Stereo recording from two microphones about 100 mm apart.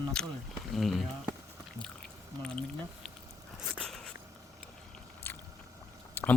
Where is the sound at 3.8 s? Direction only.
5° left (ahead or behind).